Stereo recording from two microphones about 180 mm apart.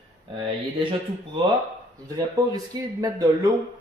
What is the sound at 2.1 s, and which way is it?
Speech, 20° right (ahead or behind).